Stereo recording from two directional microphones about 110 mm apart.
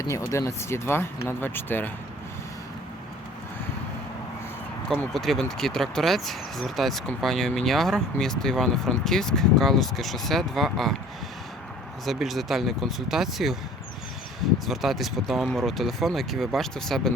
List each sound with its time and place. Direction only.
0.1 s speech: 25° left (ahead or behind)
5.1 s speech: centre (ahead or behind)
12.0 s speech: centre (ahead or behind)
14.7 s speech: centre (ahead or behind)